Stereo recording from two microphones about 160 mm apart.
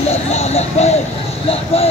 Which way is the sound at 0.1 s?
45° left (ahead or behind).